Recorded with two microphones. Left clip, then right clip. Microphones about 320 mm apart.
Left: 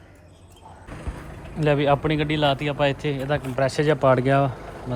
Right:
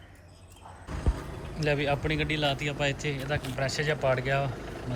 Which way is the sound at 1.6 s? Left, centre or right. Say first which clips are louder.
Left 8 dB; centre.